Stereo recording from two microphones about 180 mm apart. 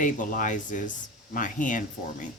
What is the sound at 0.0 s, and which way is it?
Speech, 45° left (ahead or behind).